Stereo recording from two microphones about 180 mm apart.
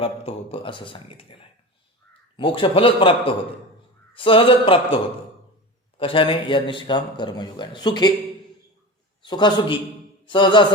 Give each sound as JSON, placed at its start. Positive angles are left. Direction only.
{"t": 0.0, "sound": "a man's voice", "side_deg": 30}
{"t": 6.0, "sound": "a man's voice", "side_deg": 30}
{"t": 9.2, "sound": "a man's voice", "side_deg": 25}